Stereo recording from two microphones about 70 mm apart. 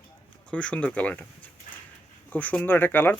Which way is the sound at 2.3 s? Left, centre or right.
Left.